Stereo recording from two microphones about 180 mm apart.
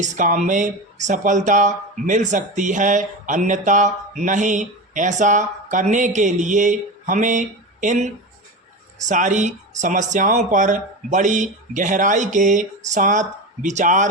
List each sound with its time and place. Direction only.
0.0 s speech: 45° right (ahead or behind)